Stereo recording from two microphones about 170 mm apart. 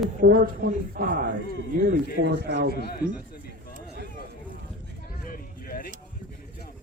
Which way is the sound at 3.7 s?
75° right (ahead or behind).